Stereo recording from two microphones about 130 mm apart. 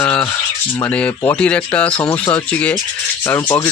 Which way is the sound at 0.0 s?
15° left (ahead or behind).